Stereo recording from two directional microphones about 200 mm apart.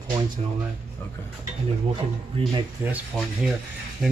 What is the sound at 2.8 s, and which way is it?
Speech, 10° right (ahead or behind).